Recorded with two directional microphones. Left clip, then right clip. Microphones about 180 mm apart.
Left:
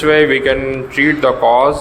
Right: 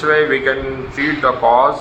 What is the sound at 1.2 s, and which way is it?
Speech, 40° left (ahead or behind).